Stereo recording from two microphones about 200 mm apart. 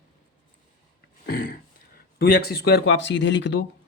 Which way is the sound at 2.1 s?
50° left (ahead or behind).